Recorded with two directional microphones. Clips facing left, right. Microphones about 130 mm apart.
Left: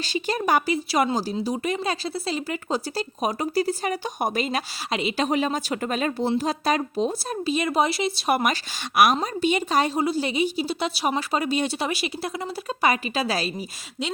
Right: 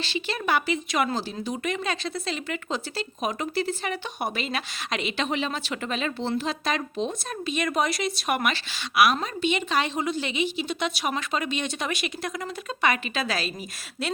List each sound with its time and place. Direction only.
0.0 s speech: 40° left (ahead or behind)